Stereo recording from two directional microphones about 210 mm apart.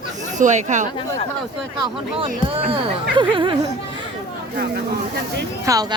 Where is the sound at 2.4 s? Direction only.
25° right (ahead or behind).